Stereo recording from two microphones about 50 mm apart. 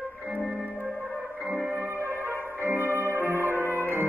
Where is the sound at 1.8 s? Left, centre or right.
Right.